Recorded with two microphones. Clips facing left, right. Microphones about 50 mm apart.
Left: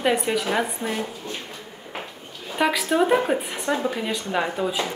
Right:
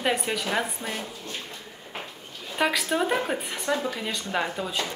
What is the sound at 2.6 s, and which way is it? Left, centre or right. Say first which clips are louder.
Speech: left 4 dB; centre.